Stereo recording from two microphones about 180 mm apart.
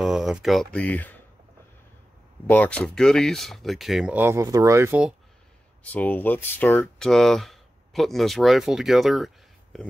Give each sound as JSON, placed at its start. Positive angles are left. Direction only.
{"t": 0.0, "sound": "speech", "side_deg": -5}
{"t": 2.5, "sound": "speech", "side_deg": 5}
{"t": 5.9, "sound": "speech", "side_deg": 10}